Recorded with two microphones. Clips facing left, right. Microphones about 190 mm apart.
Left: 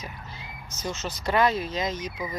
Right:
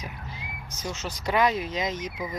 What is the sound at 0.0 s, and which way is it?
Speech, 15° right (ahead or behind).